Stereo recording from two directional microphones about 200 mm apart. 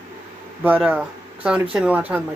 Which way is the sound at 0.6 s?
10° right (ahead or behind).